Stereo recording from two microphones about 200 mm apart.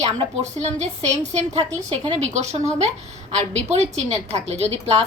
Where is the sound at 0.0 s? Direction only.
35° right (ahead or behind).